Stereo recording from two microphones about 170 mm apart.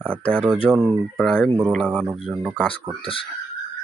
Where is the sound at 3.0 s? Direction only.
30° left (ahead or behind).